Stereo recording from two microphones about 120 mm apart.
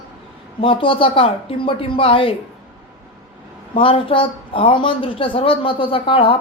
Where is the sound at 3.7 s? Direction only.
50° left (ahead or behind).